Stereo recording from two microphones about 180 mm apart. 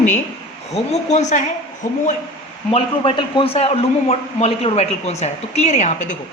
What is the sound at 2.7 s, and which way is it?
A man's voice, 25° left (ahead or behind).